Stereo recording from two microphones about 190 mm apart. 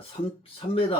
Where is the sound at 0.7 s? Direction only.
30° left (ahead or behind).